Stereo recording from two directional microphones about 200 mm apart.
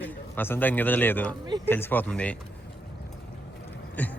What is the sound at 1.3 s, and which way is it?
Speech, 20° right (ahead or behind).